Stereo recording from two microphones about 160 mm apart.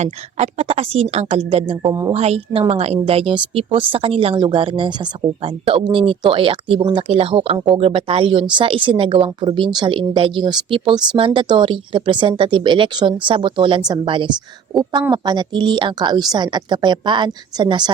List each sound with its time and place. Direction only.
0.0 s a woman's voice: 45° right (ahead or behind)
1.9 s a woman's voice: 25° right (ahead or behind)
2.1 s a woman's voice: 40° right (ahead or behind)